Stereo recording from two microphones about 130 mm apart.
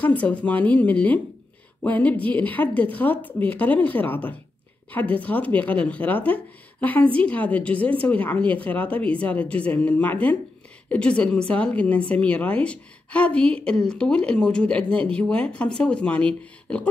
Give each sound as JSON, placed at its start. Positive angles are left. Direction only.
{"t": 0.0, "sound": "speech", "side_deg": 10}